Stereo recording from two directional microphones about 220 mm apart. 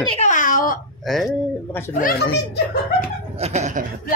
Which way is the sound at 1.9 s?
40° left (ahead or behind).